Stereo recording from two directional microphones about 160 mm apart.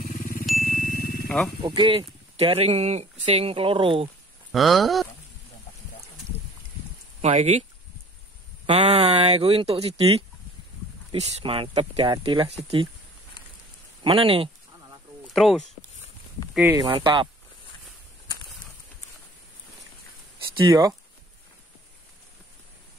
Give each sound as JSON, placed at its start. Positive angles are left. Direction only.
{"t": 0.0, "sound": "ding", "side_deg": 65}
{"t": 0.7, "sound": "a sound", "side_deg": 70}
{"t": 1.6, "sound": "speech", "side_deg": -35}
{"t": 4.5, "sound": "speech", "side_deg": 0}
{"t": 7.2, "sound": "speech", "side_deg": -45}
{"t": 8.6, "sound": "speech", "side_deg": -40}
{"t": 14.0, "sound": "speech", "side_deg": -35}
{"t": 15.2, "sound": "speech", "side_deg": 0}
{"t": 16.7, "sound": "speech", "side_deg": -30}
{"t": 20.5, "sound": "speech", "side_deg": -25}